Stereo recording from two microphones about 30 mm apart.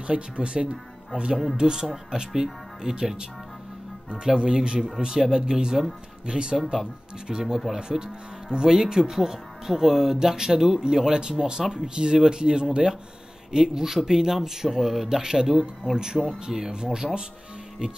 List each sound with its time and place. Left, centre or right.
0.0 s speech: right
5.0 s speech: centre
7.6 s speech: centre
8.5 s speech: right
16.4 s speech: right